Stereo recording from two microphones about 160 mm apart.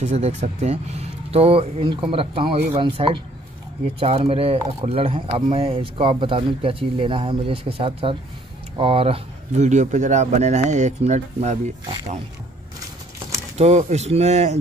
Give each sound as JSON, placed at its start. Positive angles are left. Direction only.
{"t": 0.0, "sound": "speech", "side_deg": -45}
{"t": 11.8, "sound": "speech", "side_deg": -30}
{"t": 13.6, "sound": "speech", "side_deg": -45}